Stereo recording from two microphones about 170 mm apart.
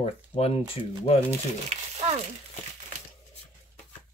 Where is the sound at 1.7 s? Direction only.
40° right (ahead or behind).